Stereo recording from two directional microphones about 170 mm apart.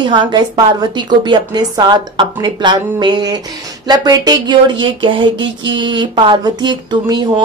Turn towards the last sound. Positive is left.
turn(degrees=-25)  # may be behind; listen again after turning